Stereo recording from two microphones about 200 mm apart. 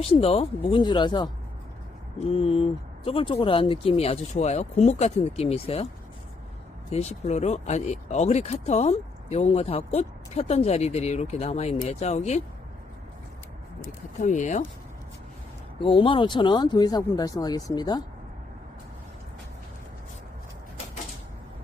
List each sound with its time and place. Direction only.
0.0 s speech: 30° left (ahead or behind)
6.9 s speech: 35° left (ahead or behind)
14.3 s speech: 40° left (ahead or behind)
15.8 s speech: 25° left (ahead or behind)